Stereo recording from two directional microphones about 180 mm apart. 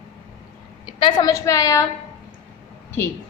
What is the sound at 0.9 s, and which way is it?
Speech, 25° left (ahead or behind).